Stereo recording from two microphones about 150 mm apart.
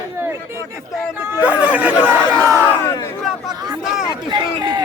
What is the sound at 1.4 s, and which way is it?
Chatter, 10° right (ahead or behind).